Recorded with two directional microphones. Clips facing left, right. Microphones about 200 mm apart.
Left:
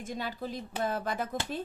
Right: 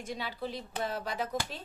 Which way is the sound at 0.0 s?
45° left (ahead or behind).